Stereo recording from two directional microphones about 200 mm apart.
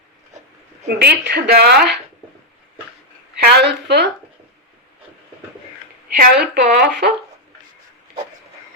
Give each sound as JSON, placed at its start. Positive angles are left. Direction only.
{"t": 0.9, "sound": "a woman's voice", "side_deg": -55}
{"t": 3.4, "sound": "a woman's voice", "side_deg": -55}
{"t": 6.1, "sound": "a woman's voice", "side_deg": -45}